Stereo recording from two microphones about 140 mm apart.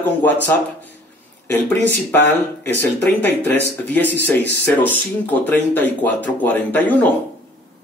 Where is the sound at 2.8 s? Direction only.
15° left (ahead or behind).